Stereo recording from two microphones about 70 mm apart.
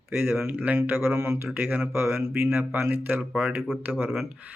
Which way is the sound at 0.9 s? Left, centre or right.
Right.